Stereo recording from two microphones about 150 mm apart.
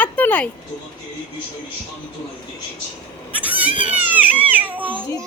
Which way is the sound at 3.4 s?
10° right (ahead or behind).